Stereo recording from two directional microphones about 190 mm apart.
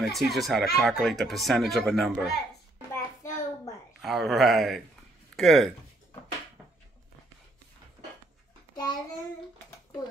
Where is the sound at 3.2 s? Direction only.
15° left (ahead or behind).